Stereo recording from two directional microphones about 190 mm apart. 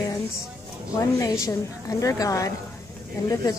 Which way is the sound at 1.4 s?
15° left (ahead or behind).